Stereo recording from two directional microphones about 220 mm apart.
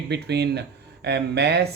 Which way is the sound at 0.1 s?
50° right (ahead or behind).